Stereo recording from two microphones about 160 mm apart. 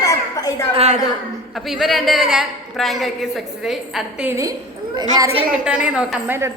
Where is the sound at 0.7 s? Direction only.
40° right (ahead or behind).